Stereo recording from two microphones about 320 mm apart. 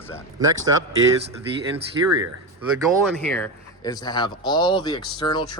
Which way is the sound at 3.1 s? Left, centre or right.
Centre.